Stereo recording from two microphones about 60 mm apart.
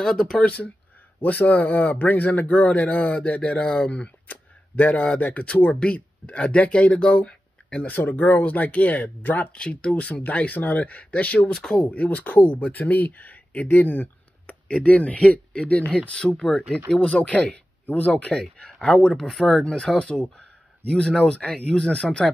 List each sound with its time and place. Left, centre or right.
0.0 s speech: centre
1.2 s speech: left
11.5 s speech: centre
17.8 s speech: left
18.4 s speech: centre
19.6 s speech: centre